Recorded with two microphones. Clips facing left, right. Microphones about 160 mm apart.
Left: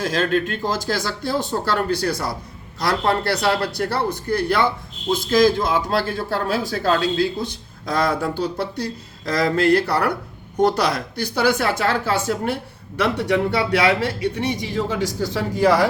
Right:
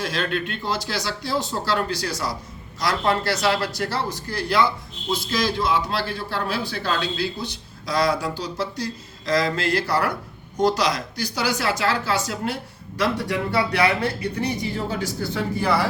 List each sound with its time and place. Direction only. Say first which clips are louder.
0.0 s a man's voice: left 5 dB; 40° left (ahead or behind)
13.0 s speech: left 4 dB; 70° left (ahead or behind); by 15.9 s 90° left